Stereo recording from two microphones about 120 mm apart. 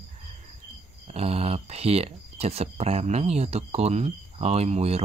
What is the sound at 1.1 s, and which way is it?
Speech, 55° right (ahead or behind).